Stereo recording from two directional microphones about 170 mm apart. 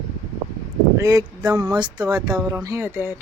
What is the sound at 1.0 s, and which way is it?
Speech, 20° right (ahead or behind).